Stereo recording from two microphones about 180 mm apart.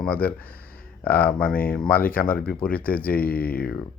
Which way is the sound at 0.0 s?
10° left (ahead or behind).